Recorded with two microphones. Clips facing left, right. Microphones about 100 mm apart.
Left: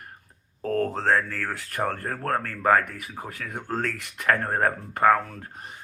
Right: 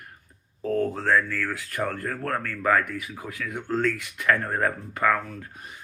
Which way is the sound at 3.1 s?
35° left (ahead or behind).